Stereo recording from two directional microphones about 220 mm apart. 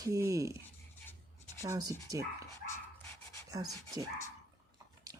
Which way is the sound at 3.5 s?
15° right (ahead or behind).